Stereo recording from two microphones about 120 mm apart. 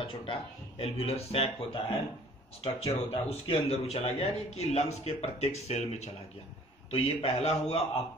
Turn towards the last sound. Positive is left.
turn(degrees=60)  # may be behind; listen again after turning